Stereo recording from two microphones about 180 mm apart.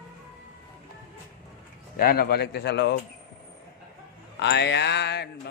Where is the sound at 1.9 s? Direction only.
55° left (ahead or behind); by 2.9 s 70° left (ahead or behind).